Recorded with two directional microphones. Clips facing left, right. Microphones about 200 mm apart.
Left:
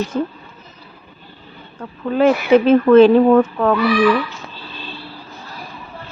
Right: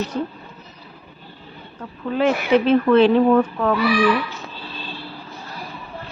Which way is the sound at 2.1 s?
45° left (ahead or behind).